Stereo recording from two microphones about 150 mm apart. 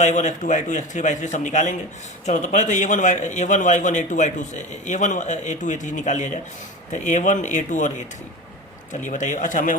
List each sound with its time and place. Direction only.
0.0 s a man's voice: 55° left (ahead or behind)